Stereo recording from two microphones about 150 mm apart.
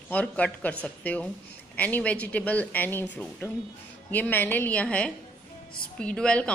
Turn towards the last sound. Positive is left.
turn(degrees=5)  # may be behind; listen again after turning